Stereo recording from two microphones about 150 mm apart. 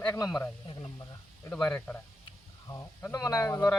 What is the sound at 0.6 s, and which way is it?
Speech, 25° left (ahead or behind).